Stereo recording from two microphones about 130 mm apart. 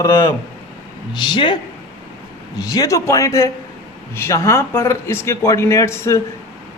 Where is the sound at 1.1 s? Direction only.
35° left (ahead or behind).